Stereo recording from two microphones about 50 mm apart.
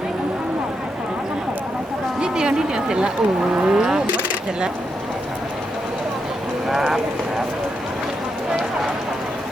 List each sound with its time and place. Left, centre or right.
2.2 s a sound: centre
3.5 s speech: centre
6.8 s speech: centre